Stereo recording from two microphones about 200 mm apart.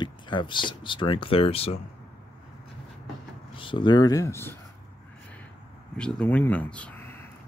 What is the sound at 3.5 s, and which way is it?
Speech, 25° left (ahead or behind).